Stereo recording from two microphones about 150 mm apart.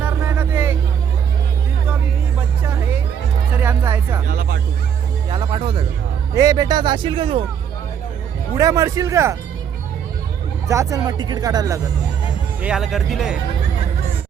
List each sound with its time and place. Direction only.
0.0 s a sound: 15° right (ahead or behind)
3.5 s music: 10° right (ahead or behind)
4.3 s music: 80° right
5.3 s music: 35° right (ahead or behind)
6.3 s speech: 25° right (ahead or behind)
8.5 s speech: 20° right (ahead or behind)
10.7 s speech: 20° right (ahead or behind)
12.6 s speech: 5° right (ahead or behind)